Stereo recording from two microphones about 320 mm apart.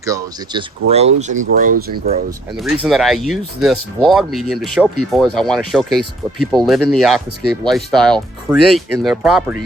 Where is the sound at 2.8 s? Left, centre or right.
Centre.